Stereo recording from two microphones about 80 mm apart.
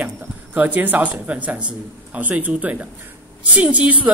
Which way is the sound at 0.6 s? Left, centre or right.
Right.